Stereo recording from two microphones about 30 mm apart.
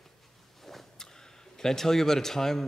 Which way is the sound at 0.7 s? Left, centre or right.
Centre.